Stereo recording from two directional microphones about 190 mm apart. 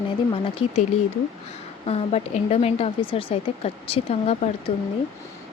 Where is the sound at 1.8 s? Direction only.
30° left (ahead or behind).